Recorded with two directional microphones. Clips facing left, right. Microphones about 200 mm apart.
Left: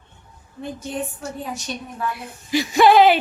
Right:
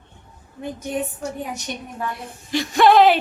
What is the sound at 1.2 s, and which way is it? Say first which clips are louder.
Speech: right 1 dB; 15° right (ahead or behind).